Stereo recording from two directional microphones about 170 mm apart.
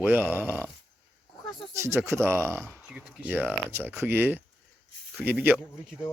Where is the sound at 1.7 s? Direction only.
15° right (ahead or behind).